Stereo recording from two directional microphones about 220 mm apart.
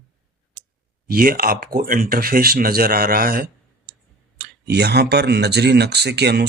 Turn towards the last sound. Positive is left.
turn(degrees=-50)  # may be behind; listen again after turning